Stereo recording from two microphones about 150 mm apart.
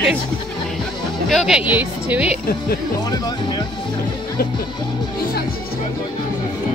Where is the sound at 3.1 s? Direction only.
25° left (ahead or behind).